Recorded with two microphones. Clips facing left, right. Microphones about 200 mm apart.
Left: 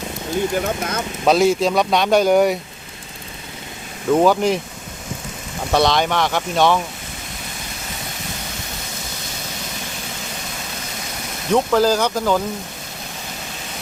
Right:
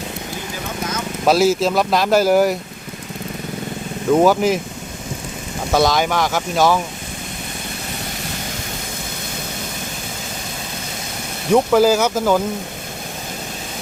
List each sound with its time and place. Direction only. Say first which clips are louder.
1.2 s speech: even; 5° right (ahead or behind)
4.1 s speech: right 1 dB; 5° right (ahead or behind)
5.7 s speech: right 1 dB; 5° right (ahead or behind)
11.5 s speech: right 3 dB; 10° right (ahead or behind)